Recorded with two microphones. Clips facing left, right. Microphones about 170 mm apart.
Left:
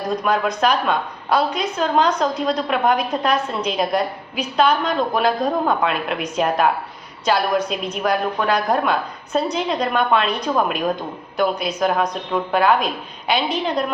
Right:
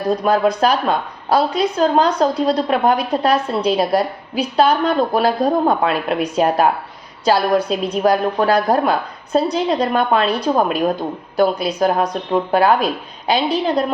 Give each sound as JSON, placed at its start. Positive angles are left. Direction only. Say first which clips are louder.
{"t": 0.3, "sound": "a woman's voice", "louder": "right 3 dB", "side_deg": -35}